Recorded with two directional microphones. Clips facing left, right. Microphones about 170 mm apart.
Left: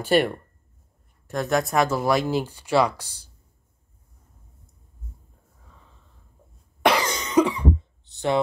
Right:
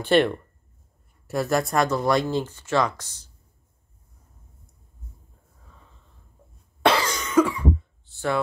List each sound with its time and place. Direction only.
0.0 s speech: 10° left (ahead or behind)
1.2 s speech: 5° right (ahead or behind); by 3.3 s 10° left (ahead or behind)
6.8 s cough: 15° left (ahead or behind)
8.1 s a sound: 20° left (ahead or behind)